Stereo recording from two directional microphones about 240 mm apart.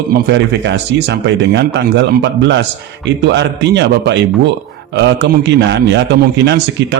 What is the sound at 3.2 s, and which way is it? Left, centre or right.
Speech, right.